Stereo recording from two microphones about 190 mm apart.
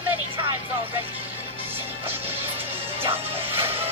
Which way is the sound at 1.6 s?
10° right (ahead or behind).